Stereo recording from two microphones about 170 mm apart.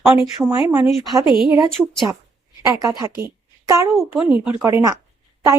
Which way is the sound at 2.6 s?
20° right (ahead or behind).